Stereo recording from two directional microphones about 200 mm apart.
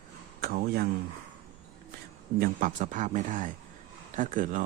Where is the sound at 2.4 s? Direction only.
40° right (ahead or behind).